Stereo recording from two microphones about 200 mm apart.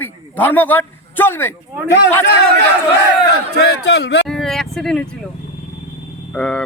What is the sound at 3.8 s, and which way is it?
Speech, 55° left (ahead or behind).